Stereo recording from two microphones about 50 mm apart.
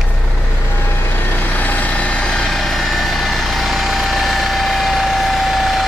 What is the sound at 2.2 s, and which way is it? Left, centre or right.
Vehicle, centre.